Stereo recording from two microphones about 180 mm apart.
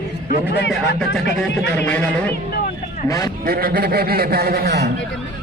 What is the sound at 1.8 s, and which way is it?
Speech, 10° left (ahead or behind).